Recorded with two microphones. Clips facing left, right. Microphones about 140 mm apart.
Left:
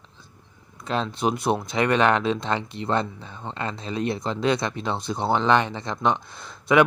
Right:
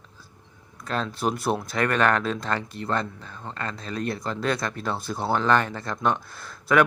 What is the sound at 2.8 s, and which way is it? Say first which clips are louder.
Speech: left 2 dB; 45° right (ahead or behind).